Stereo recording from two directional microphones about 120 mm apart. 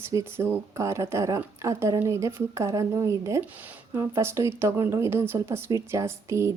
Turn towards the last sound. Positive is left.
turn(degrees=-25)  # may be behind; listen again after turning